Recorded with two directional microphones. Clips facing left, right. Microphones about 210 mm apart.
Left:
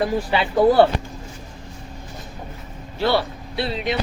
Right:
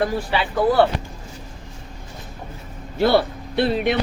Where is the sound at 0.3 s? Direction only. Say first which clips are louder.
Left 6 dB; 25° left (ahead or behind).